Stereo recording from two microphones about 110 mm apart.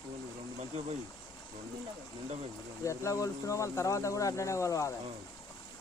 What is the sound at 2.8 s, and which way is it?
Speech, 25° left (ahead or behind).